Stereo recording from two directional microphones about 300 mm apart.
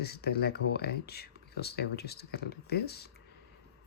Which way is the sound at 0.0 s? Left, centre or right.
Left.